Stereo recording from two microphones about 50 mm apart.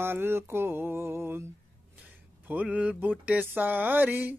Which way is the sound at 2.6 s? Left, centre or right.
Right.